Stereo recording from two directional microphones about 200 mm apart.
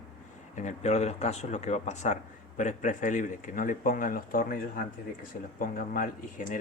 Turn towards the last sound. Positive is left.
turn(degrees=45)  # may be behind; listen again after turning